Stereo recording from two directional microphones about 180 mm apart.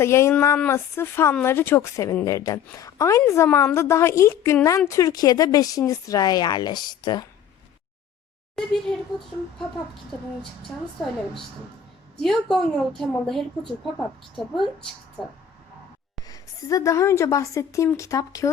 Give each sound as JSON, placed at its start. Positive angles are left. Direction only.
{"t": 0.0, "sound": "speech", "side_deg": 15}
{"t": 8.5, "sound": "a woman's voice", "side_deg": 0}
{"t": 12.2, "sound": "a woman's voice", "side_deg": 0}
{"t": 16.2, "sound": "speech", "side_deg": 20}